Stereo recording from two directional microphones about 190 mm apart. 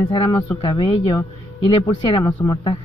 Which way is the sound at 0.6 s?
25° left (ahead or behind).